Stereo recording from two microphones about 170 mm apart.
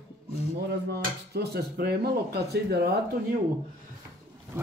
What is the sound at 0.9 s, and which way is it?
Speech, 70° right (ahead or behind).